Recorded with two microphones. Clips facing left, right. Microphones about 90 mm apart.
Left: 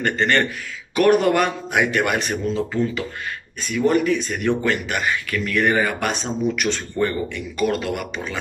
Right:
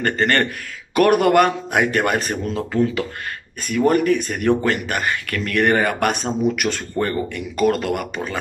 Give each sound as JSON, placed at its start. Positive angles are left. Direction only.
{"t": 0.0, "sound": "speech", "side_deg": -45}